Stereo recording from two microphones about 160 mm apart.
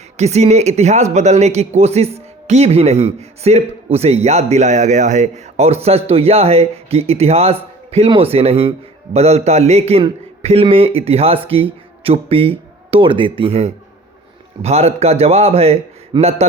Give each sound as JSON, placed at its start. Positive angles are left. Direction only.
{"t": 0.2, "sound": "a man's voice", "side_deg": -45}